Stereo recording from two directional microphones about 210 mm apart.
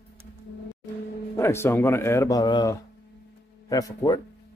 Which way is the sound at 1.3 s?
10° left (ahead or behind).